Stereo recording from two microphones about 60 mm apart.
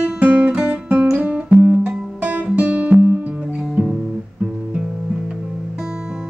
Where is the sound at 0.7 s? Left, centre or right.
Right.